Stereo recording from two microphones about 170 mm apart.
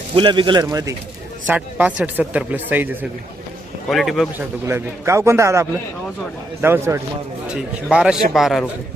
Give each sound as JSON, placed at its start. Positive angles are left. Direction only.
{"t": 0.1, "sound": "speech", "side_deg": -30}
{"t": 1.5, "sound": "speech", "side_deg": -10}
{"t": 3.8, "sound": "a man's voice", "side_deg": 0}
{"t": 4.4, "sound": "speech", "side_deg": -15}
{"t": 7.4, "sound": "a man's voice", "side_deg": -5}